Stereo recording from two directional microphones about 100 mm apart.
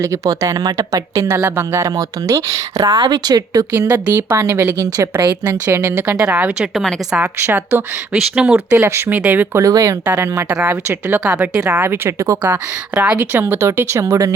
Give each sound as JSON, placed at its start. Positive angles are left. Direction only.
{"t": 0.0, "sound": "speech", "side_deg": -35}
{"t": 3.0, "sound": "speech", "side_deg": -45}
{"t": 3.7, "sound": "a woman's voice", "side_deg": -20}
{"t": 6.1, "sound": "speech", "side_deg": -10}
{"t": 6.7, "sound": "a woman's voice", "side_deg": 0}
{"t": 7.2, "sound": "a woman's voice", "side_deg": -20}
{"t": 8.1, "sound": "speech", "side_deg": -10}
{"t": 8.7, "sound": "a woman's voice", "side_deg": -25}
{"t": 9.6, "sound": "a woman's voice", "side_deg": -35}
{"t": 10.5, "sound": "a woman's voice", "side_deg": -15}
{"t": 12.4, "sound": "a woman's voice", "side_deg": -15}